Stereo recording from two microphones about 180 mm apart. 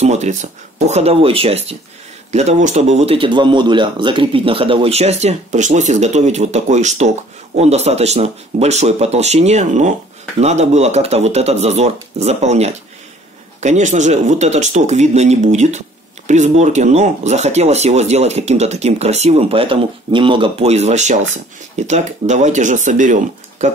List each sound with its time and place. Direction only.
0.0 s speech: 40° right (ahead or behind)